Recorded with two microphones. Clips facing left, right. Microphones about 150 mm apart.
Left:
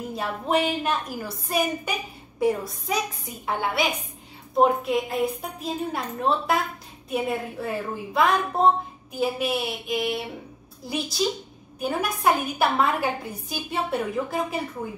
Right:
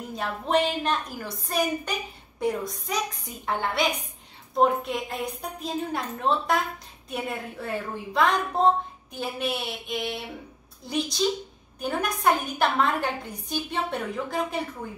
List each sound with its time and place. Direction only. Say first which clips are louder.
0.1 s a woman's voice: even; 5° left (ahead or behind)